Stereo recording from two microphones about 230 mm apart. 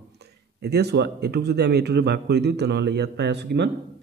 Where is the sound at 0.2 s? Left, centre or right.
Right.